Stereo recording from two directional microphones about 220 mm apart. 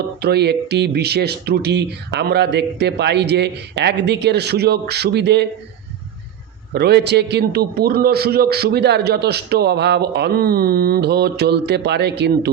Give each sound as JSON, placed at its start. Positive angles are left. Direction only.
{"t": 0.2, "sound": "a man's voice", "side_deg": -45}
{"t": 6.7, "sound": "a man's voice", "side_deg": -50}